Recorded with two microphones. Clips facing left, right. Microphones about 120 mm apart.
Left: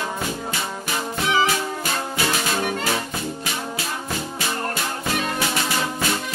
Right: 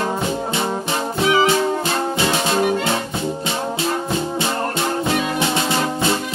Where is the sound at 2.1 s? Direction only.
25° right (ahead or behind).